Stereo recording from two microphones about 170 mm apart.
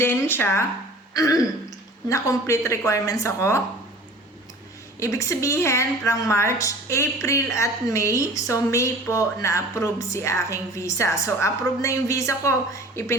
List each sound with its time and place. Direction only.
0.0 s a woman's voice: 15° left (ahead or behind)
4.9 s a woman's voice: 15° left (ahead or behind)